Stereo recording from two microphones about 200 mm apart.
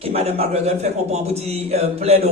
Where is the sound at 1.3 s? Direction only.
30° right (ahead or behind).